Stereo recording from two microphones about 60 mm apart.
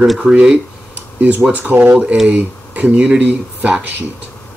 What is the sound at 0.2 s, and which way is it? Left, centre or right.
Speech, centre.